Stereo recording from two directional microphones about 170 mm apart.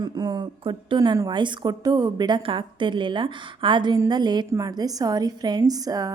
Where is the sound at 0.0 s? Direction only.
25° right (ahead or behind).